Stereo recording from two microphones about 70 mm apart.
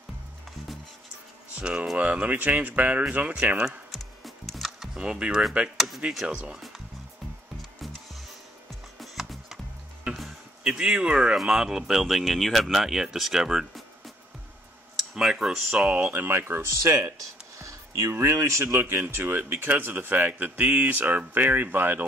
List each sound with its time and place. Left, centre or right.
1.5 s speech: centre
3.9 s music: centre
5.0 s speech: centre
6.3 s speech: centre
9.0 s music: centre
10.6 s speech: centre
16.1 s speech: right
17.6 s music: right
18.1 s speech: right